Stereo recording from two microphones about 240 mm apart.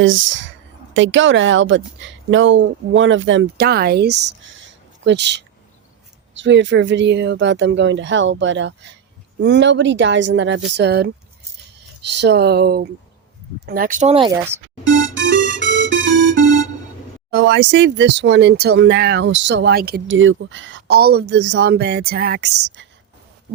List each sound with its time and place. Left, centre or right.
0.0 s speech: right
14.3 s speech: centre
15.2 s music: right
17.3 s speech: right